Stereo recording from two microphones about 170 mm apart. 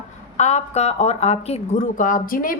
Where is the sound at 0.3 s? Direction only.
40° left (ahead or behind).